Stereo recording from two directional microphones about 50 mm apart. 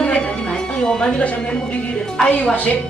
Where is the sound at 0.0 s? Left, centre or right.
Left.